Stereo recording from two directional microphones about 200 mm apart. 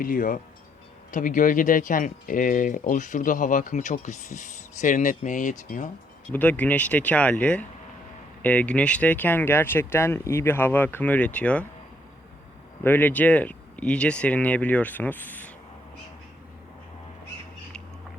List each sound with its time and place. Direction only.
0.0 s speech: 45° left (ahead or behind)
6.3 s speech: 10° left (ahead or behind)
12.8 s speech: 10° left (ahead or behind)